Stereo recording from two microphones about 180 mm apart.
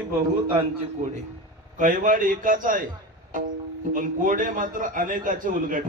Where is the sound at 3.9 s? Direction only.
45° right (ahead or behind).